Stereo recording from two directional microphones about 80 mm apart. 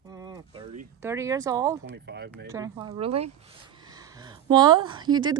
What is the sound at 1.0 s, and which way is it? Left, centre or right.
Speech, right.